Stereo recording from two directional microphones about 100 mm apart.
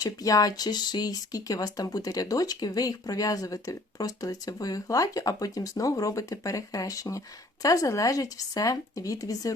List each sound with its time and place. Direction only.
0.0 s speech: 35° left (ahead or behind)